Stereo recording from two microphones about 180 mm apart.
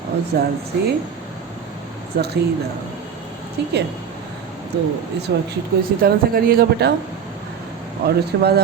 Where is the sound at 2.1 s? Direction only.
65° right (ahead or behind).